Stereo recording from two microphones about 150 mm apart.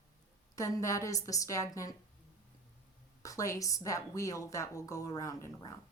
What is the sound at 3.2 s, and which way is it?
Speech, 20° left (ahead or behind).